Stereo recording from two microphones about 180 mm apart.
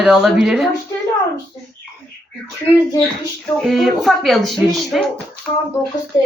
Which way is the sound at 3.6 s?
Centre (ahead or behind).